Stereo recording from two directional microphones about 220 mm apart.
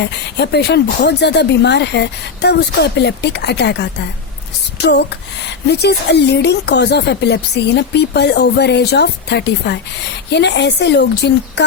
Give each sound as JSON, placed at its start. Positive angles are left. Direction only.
{"t": 0.0, "sound": "speech", "side_deg": 50}